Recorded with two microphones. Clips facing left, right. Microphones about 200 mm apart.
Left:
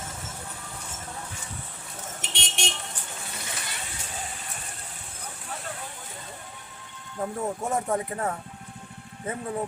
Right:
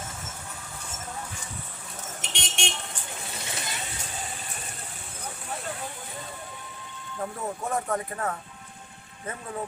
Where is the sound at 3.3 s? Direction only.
25° right (ahead or behind).